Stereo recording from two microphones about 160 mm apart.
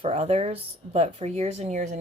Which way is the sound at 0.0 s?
40° right (ahead or behind).